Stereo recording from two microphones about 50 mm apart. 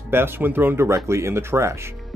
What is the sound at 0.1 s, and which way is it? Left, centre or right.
Speech, right.